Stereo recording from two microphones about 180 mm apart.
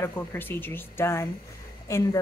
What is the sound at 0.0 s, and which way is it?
A woman's voice, 15° left (ahead or behind).